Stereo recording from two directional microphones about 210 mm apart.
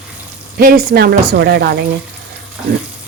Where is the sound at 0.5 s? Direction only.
45° right (ahead or behind).